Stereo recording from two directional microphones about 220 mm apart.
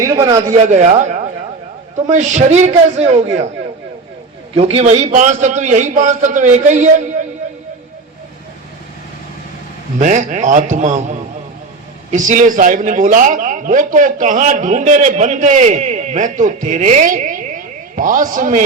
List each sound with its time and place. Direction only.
0.7 s a man's voice: 35° right (ahead or behind)
4.5 s a man's voice: 30° right (ahead or behind)
10.0 s a man's voice: 35° right (ahead or behind)